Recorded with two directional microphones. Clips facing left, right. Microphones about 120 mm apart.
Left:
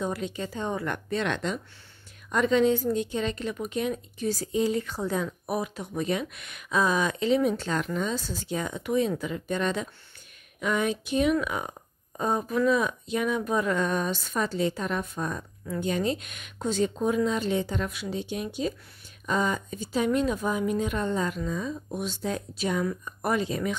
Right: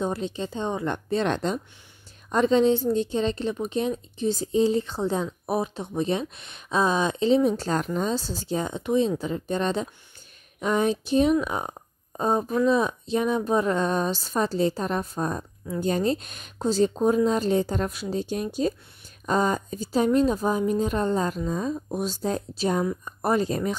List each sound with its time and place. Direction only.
0.0 s speech: 30° right (ahead or behind)